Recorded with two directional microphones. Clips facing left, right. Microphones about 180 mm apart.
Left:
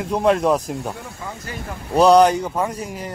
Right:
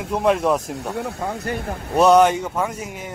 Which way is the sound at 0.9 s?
70° right (ahead or behind).